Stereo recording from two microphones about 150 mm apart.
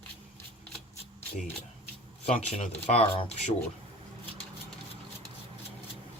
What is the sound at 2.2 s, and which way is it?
Speech, 45° left (ahead or behind).